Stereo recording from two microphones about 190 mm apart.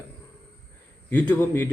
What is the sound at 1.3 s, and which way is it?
Speech, 10° left (ahead or behind).